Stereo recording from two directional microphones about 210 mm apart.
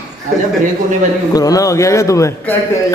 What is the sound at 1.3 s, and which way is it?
A man's voice, 15° left (ahead or behind).